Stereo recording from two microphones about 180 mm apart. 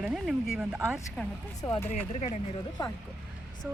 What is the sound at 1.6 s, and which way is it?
Speech, 15° left (ahead or behind).